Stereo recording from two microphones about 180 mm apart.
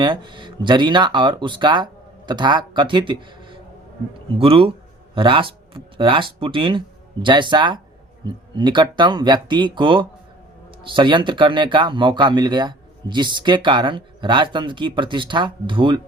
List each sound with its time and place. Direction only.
0.0 s speech: 25° right (ahead or behind)